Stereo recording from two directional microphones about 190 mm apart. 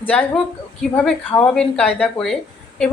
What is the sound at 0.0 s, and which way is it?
A woman's voice, 10° left (ahead or behind).